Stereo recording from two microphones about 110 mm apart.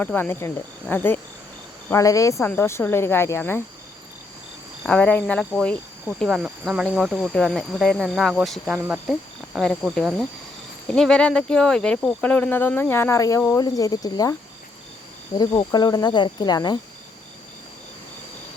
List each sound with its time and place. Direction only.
0.0 s cricket: 15° left (ahead or behind)
1.9 s cricket: 30° left (ahead or behind)
4.9 s speech: 10° left (ahead or behind)
8.6 s speech: 15° right (ahead or behind)
9.0 s speech: centre (ahead or behind); by 13.4 s 30° left (ahead or behind)
13.6 s cricket: 35° left (ahead or behind)
15.4 s cricket: 40° left (ahead or behind)